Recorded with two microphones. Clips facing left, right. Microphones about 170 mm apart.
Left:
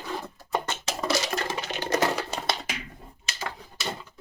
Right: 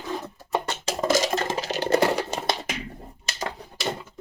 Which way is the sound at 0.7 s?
45° right (ahead or behind).